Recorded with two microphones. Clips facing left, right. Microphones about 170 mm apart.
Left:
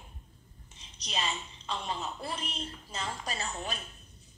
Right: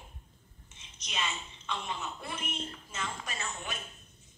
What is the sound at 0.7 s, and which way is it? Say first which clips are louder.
A woman's voice: left 2 dB; 35° left (ahead or behind).